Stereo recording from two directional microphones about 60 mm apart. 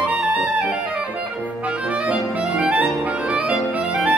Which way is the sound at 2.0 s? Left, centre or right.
Centre.